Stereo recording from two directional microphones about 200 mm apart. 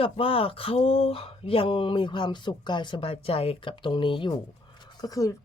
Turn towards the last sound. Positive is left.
turn(degrees=15)  # may be behind; listen again after turning